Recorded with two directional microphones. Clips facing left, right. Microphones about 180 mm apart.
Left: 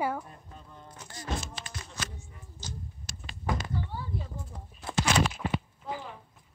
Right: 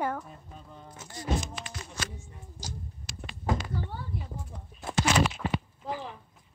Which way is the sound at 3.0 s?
45° left (ahead or behind).